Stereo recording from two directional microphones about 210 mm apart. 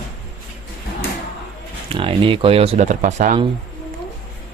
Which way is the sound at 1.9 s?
25° right (ahead or behind).